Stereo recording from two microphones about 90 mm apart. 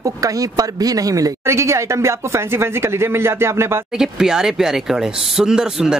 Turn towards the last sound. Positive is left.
turn(degrees=-5)  # may be behind; listen again after turning